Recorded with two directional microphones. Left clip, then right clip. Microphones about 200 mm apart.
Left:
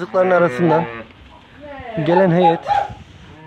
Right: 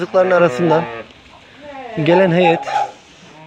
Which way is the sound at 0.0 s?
Centre (ahead or behind).